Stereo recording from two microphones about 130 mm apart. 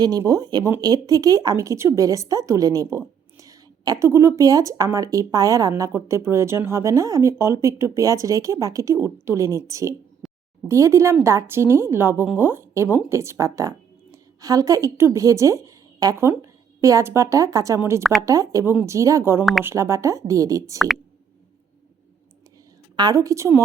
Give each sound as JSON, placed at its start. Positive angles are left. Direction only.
{"t": 0.0, "sound": "speech", "side_deg": -30}
{"t": 10.2, "sound": "a sound", "side_deg": 0}
{"t": 10.7, "sound": "a woman's voice", "side_deg": -20}
{"t": 20.7, "sound": "speech", "side_deg": 0}
{"t": 23.0, "sound": "speech", "side_deg": -30}